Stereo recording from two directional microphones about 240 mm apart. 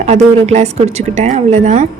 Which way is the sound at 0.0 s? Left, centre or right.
Right.